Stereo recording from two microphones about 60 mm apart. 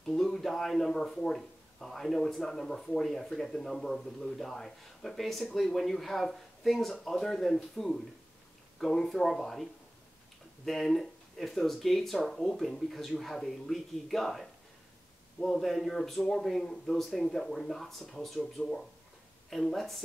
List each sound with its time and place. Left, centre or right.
0.0 s speech: centre